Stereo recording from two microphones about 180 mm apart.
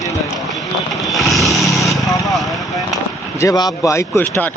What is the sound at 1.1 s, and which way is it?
Speech, centre (ahead or behind).